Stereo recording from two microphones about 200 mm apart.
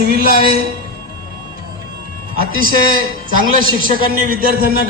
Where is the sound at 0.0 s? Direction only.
50° right (ahead or behind).